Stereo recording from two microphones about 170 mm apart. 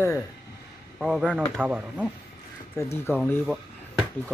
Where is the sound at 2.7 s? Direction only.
15° left (ahead or behind).